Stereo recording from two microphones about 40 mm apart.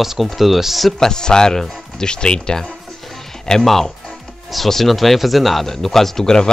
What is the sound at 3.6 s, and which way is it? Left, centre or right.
Speech, centre.